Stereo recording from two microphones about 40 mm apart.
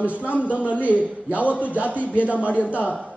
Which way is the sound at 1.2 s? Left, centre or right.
Right.